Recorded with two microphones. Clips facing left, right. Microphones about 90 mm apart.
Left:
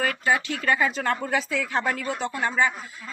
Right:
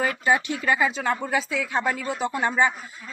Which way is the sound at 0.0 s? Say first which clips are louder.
Right 2 dB; 20° right (ahead or behind).